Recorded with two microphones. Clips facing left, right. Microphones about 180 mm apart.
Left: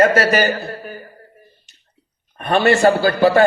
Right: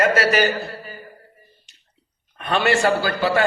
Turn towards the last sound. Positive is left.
turn(degrees=45)  # may be behind; listen again after turning